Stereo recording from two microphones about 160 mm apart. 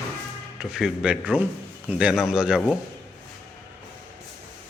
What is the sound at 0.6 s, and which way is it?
Speech, 5° right (ahead or behind).